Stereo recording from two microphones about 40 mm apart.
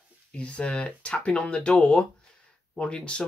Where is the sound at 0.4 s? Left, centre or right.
Left.